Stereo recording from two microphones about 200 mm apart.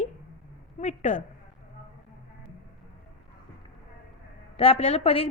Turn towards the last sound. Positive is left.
turn(degrees=30)  # may be behind; listen again after turning